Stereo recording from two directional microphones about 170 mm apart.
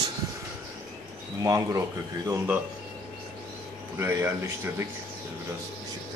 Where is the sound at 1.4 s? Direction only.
20° right (ahead or behind).